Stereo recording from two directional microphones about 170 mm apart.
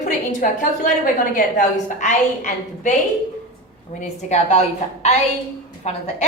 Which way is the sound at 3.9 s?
45° left (ahead or behind).